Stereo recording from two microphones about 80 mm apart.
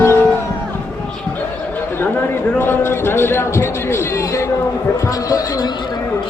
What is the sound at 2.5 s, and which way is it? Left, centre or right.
A man's voice, left.